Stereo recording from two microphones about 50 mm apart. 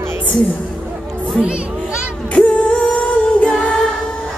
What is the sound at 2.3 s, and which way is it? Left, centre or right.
Music, centre.